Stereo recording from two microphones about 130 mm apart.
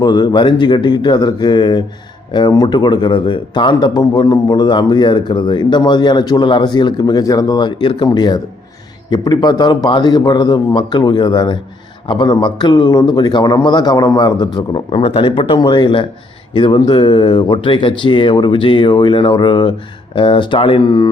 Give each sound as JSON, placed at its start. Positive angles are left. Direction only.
{"t": 0.0, "sound": "speech", "side_deg": 30}